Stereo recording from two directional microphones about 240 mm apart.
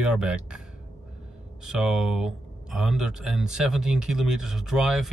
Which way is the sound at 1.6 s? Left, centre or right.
Centre.